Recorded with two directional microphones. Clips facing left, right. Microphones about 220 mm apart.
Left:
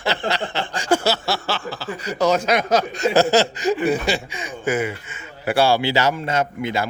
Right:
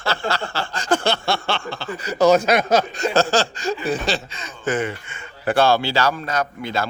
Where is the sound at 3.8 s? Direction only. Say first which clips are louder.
Left 3 dB; 15° left (ahead or behind).